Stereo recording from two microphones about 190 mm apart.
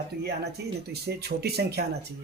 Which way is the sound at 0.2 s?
60° right (ahead or behind).